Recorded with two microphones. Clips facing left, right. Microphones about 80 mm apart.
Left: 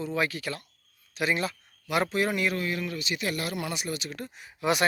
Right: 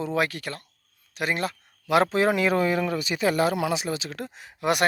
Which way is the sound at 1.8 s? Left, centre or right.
Right.